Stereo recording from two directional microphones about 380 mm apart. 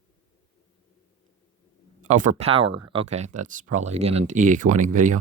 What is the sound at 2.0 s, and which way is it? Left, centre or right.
Speech, centre.